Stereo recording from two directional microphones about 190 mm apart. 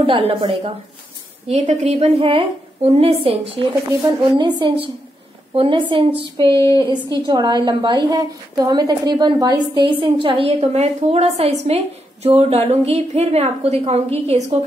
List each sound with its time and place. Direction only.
0.0 s a woman's voice: 30° right (ahead or behind)
6.5 s a sound: 15° left (ahead or behind)
6.8 s a woman's voice: 25° right (ahead or behind)